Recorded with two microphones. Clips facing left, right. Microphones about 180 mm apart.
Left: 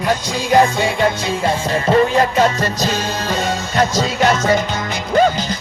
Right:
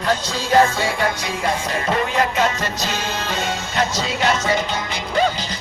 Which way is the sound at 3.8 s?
45° left (ahead or behind).